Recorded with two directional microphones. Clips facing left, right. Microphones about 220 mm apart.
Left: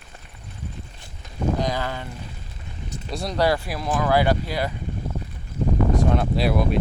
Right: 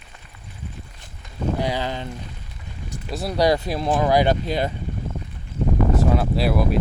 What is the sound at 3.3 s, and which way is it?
Speech, 20° right (ahead or behind).